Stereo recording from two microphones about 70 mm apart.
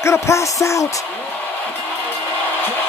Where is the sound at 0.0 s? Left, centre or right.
Left.